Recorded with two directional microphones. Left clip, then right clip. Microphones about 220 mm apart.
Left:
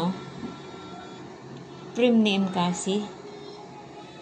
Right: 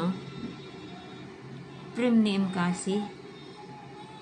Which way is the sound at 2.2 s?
35° right (ahead or behind).